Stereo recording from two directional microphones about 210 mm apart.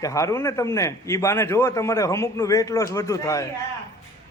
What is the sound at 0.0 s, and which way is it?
A man's voice, 15° left (ahead or behind).